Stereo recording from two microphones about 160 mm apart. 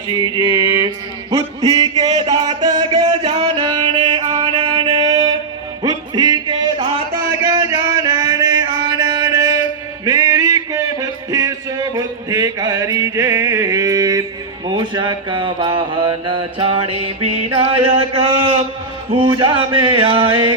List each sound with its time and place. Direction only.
0.1 s mantra: 30° right (ahead or behind)
1.3 s a sound: 20° right (ahead or behind)
3.2 s music: 35° right (ahead or behind)
5.0 s a sound: 25° right (ahead or behind)
5.8 s music: 25° right (ahead or behind)
14.8 s mantra: 30° right (ahead or behind)